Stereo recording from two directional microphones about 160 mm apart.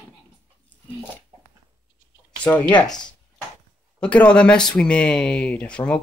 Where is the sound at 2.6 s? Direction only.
30° left (ahead or behind).